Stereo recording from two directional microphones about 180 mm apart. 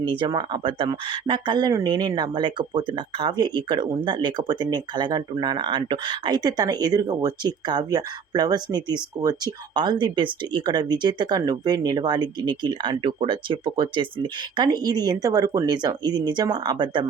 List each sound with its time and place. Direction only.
0.0 s speech: 25° right (ahead or behind)